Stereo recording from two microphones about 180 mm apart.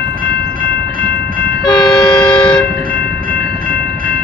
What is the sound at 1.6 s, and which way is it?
Train, 25° left (ahead or behind).